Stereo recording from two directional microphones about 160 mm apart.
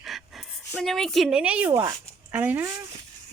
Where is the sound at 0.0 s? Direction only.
Centre (ahead or behind).